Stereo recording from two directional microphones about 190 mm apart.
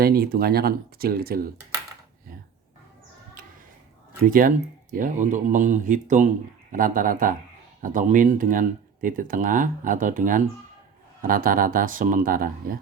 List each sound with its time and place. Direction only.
0.0 s speech: 50° right (ahead or behind)
4.3 s speech: 45° right (ahead or behind)